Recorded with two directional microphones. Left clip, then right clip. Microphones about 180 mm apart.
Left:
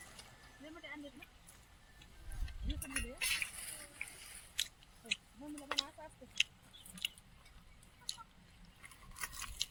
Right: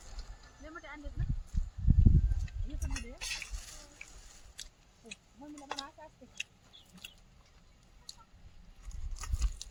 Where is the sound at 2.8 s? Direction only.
45° right (ahead or behind).